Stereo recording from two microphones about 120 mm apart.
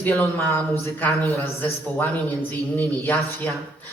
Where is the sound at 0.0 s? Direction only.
15° left (ahead or behind).